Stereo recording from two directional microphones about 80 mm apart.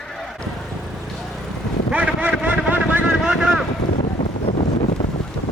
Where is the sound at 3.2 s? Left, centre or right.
Centre.